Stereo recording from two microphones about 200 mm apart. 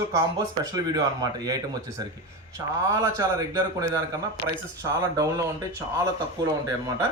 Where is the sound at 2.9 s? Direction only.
15° right (ahead or behind).